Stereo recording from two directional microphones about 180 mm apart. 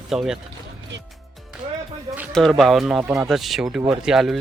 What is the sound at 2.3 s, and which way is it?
Speech, centre (ahead or behind).